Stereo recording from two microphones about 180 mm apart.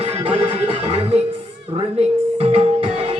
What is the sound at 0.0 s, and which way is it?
Music, 30° right (ahead or behind).